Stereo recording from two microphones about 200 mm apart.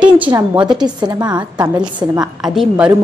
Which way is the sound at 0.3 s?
20° right (ahead or behind).